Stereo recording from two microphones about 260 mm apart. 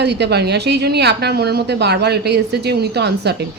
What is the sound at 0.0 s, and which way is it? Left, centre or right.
A woman's voice, right.